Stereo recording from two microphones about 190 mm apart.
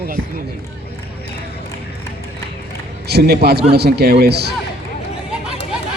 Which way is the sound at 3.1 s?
55° right (ahead or behind).